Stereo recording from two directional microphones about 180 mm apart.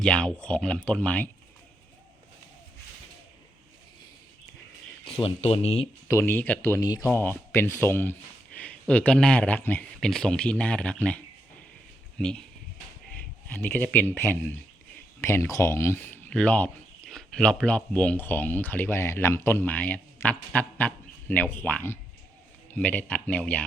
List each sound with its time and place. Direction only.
0.0 s speech: 5° left (ahead or behind)
5.0 s speech: 30° left (ahead or behind)
6.1 s speech: 15° left (ahead or behind)